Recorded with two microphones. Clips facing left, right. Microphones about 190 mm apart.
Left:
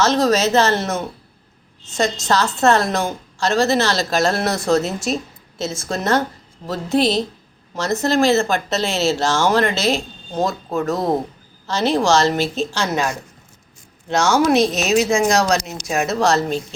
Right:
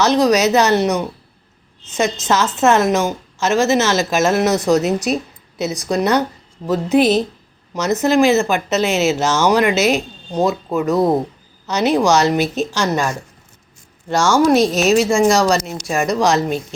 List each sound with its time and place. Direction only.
0.0 s speech: 15° right (ahead or behind)
12.8 s speech: 5° left (ahead or behind)